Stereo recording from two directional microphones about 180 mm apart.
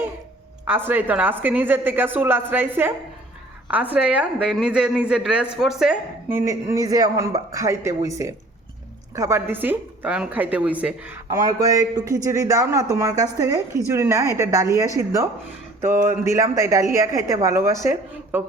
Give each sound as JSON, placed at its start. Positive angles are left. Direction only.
{"t": 0.7, "sound": "a woman's voice", "side_deg": -10}
{"t": 11.3, "sound": "a woman's voice", "side_deg": -20}